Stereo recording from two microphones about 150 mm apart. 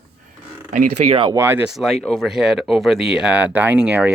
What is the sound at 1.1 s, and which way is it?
Speech, 30° right (ahead or behind).